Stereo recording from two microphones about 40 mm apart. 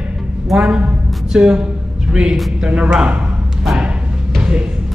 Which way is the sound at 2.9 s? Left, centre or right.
Right.